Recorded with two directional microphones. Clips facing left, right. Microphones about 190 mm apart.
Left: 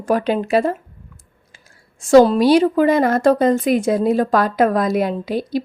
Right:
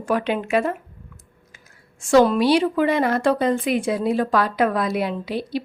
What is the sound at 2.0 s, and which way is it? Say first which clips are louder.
A woman's voice: left 5 dB; 35° left (ahead or behind).